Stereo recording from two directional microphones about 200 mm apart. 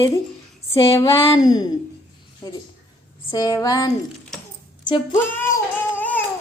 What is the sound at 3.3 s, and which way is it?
Speech, 20° left (ahead or behind).